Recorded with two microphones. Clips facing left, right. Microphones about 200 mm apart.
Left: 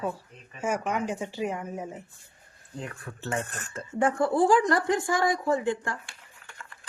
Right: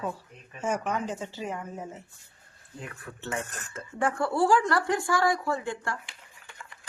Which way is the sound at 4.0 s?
20° left (ahead or behind).